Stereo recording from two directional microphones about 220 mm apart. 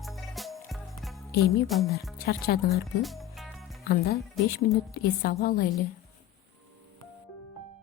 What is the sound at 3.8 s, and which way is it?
Speech, 45° left (ahead or behind).